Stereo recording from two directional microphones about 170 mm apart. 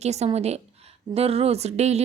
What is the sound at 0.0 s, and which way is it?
Speech, 40° right (ahead or behind).